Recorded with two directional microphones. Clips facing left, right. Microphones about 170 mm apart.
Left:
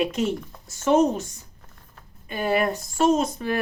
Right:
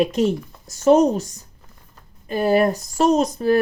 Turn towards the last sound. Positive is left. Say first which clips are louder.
# right 6 dB
turn(degrees=-35)  # may be behind; listen again after turning